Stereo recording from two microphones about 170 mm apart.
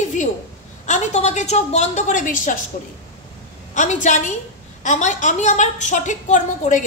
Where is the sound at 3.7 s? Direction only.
45° left (ahead or behind).